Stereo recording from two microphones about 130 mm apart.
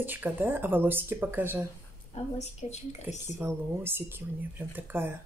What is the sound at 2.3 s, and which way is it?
Speech, 60° left (ahead or behind).